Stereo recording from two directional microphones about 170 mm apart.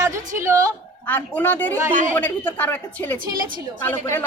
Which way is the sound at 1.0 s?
10° left (ahead or behind).